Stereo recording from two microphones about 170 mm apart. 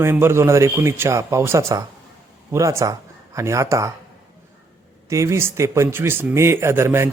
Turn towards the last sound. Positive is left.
turn(degrees=-15)  # may be behind; listen again after turning